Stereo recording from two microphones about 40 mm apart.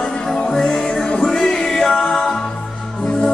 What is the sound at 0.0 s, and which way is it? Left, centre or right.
Music, centre.